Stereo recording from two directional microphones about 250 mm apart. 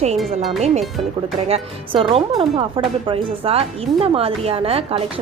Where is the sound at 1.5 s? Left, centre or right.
Right.